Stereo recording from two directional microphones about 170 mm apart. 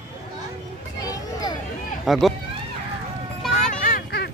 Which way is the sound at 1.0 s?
20° left (ahead or behind).